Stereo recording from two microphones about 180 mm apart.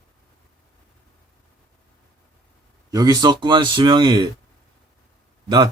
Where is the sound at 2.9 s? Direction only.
20° right (ahead or behind).